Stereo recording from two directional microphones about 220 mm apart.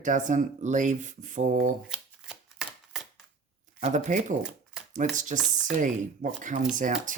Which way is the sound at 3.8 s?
35° right (ahead or behind).